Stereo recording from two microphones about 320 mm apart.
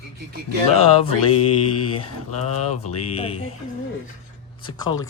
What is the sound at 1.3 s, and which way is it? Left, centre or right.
Mantra, left.